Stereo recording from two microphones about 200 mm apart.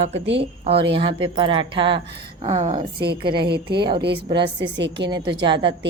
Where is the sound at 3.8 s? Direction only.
25° right (ahead or behind).